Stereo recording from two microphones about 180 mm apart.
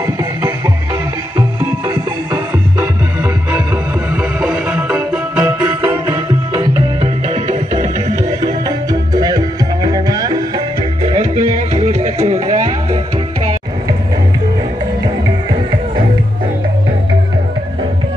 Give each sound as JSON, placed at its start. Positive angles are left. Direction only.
{"t": 4.4, "sound": "music", "side_deg": -10}
{"t": 5.7, "sound": "music", "side_deg": -25}
{"t": 8.6, "sound": "music", "side_deg": -20}
{"t": 11.1, "sound": "music", "side_deg": -40}